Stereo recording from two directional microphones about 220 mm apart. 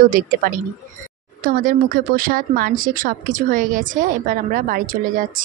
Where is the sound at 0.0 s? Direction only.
40° right (ahead or behind).